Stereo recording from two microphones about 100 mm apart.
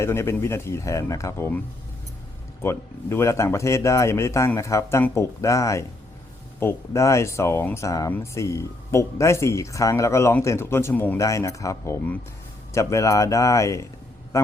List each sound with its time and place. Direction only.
0.0 s speech: 25° left (ahead or behind)
2.6 s speech: 25° left (ahead or behind)
11.2 s speech: 30° left (ahead or behind)
14.3 s a sound: 30° left (ahead or behind)